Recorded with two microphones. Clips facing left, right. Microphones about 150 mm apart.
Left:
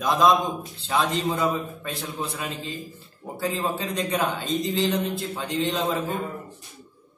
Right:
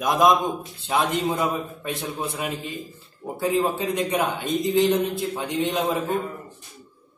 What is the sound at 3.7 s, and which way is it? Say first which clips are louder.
A man's voice: right 3 dB; 10° right (ahead or behind).